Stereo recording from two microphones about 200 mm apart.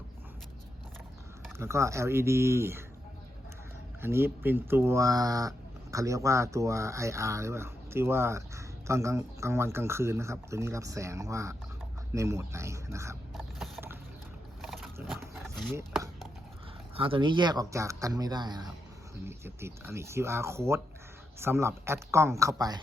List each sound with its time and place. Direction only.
1.5 s speech: 15° right (ahead or behind)
4.0 s speech: 10° right (ahead or behind)
13.3 s mechanisms: centre (ahead or behind)
14.6 s a sound: centre (ahead or behind)
16.9 s speech: 25° right (ahead or behind)